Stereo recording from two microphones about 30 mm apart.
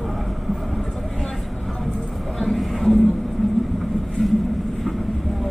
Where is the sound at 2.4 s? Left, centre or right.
Centre.